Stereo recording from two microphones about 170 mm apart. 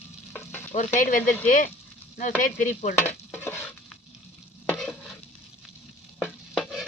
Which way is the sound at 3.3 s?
15° left (ahead or behind).